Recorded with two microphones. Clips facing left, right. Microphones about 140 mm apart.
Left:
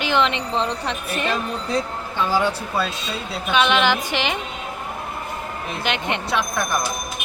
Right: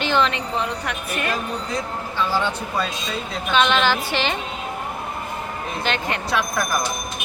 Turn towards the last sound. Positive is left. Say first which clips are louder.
# even
turn(degrees=0)  # may be behind; listen again after turning